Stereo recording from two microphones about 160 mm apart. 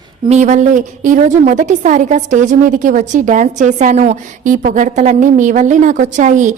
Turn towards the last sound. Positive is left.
turn(degrees=-50)  # may be behind; listen again after turning